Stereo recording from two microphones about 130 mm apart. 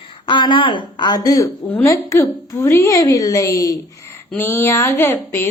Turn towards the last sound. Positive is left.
turn(degrees=20)  # may be behind; listen again after turning